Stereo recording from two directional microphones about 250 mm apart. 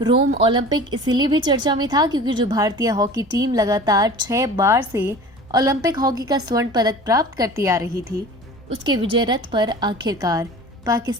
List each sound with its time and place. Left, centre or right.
0.3 s a woman's voice: centre